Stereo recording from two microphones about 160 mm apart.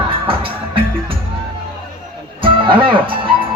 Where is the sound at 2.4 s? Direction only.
30° right (ahead or behind).